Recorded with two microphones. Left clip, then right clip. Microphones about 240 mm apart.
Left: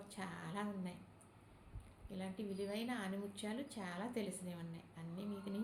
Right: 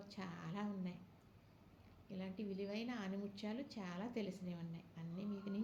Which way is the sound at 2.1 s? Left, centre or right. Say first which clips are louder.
Left 2 dB; centre.